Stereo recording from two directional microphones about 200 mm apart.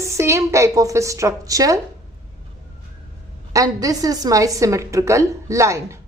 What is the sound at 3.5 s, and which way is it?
A woman's voice, 15° right (ahead or behind).